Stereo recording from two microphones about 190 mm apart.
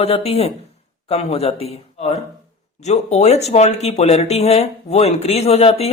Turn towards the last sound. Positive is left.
turn(degrees=35)  # may be behind; listen again after turning